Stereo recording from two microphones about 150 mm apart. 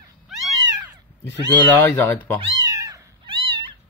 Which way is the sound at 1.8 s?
15° left (ahead or behind).